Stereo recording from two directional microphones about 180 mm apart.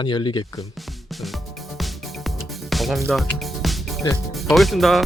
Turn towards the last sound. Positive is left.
turn(degrees=0)  # may be behind; listen again after turning